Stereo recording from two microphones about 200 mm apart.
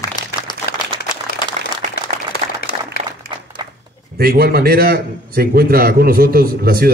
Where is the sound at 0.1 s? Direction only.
20° left (ahead or behind).